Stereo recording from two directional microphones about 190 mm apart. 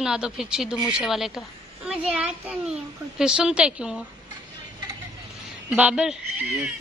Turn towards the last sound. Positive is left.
turn(degrees=-5)  # may be behind; listen again after turning